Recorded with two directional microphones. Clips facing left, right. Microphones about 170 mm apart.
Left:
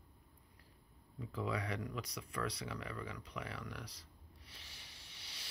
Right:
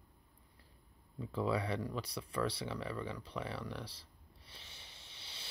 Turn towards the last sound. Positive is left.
turn(degrees=-25)  # may be behind; listen again after turning